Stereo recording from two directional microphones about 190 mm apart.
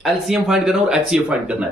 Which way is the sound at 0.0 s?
Centre (ahead or behind).